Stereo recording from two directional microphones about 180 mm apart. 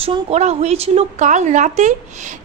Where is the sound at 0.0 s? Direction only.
35° right (ahead or behind).